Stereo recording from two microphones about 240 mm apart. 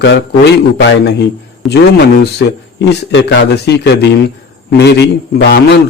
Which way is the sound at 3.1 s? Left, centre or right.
Left.